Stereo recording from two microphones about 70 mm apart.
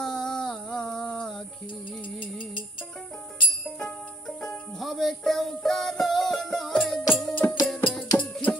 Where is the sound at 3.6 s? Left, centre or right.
Centre.